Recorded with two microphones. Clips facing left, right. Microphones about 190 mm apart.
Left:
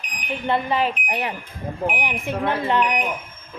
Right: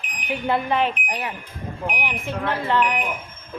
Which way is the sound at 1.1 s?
25° left (ahead or behind).